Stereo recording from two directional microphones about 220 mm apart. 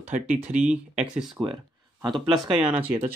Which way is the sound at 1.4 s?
Centre (ahead or behind).